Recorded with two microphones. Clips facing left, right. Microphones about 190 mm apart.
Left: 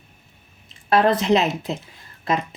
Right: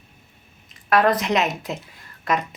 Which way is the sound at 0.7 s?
30° left (ahead or behind).